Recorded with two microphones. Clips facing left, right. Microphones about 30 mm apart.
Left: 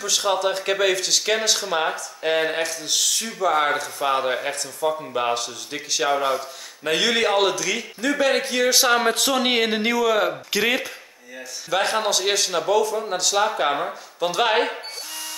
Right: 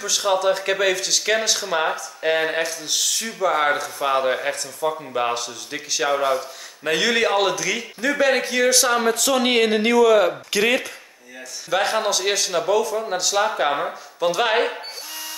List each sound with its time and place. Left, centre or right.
0.0 s speech: centre
8.7 s speech: centre
9.3 s speech: centre